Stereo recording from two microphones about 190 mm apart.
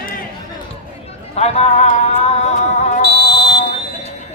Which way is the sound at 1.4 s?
35° left (ahead or behind).